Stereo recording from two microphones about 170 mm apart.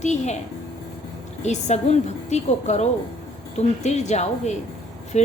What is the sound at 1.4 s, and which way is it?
A woman's voice, 40° left (ahead or behind).